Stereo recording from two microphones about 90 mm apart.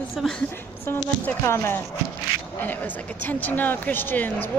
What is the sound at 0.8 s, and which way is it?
Speech, 25° left (ahead or behind).